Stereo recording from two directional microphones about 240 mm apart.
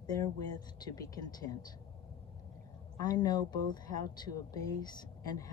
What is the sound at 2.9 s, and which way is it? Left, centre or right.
Speech, centre.